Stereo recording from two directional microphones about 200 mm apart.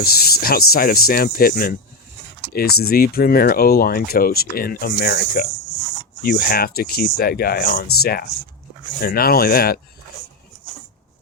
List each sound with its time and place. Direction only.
0.0 s speech: 50° left (ahead or behind)
9.0 s speech: 50° left (ahead or behind)